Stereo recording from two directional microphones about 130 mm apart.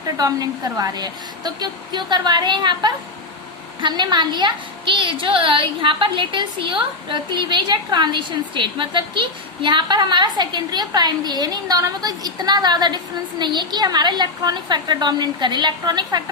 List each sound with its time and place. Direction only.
0.2 s a woman's voice: 30° right (ahead or behind)